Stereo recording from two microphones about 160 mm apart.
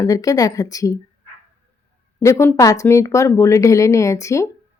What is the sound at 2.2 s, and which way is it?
Speech, 15° left (ahead or behind).